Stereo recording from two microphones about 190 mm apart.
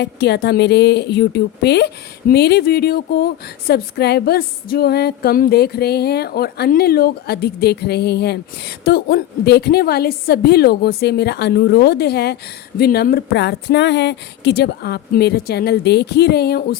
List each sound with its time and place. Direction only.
0.0 s speech: 60° left (ahead or behind)